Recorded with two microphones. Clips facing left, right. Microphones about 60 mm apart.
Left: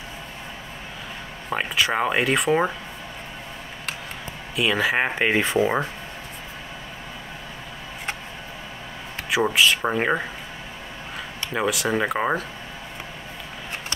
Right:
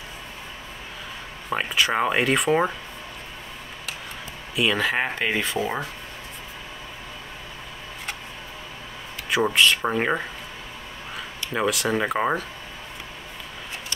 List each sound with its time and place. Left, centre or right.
1.5 s speech: centre
4.6 s speech: centre
5.0 s speech: centre
9.3 s speech: centre
11.5 s speech: centre